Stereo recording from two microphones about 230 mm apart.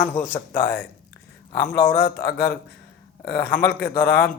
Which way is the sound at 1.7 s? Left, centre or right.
Left.